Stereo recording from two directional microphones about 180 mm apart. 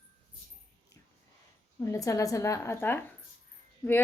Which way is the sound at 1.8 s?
15° left (ahead or behind).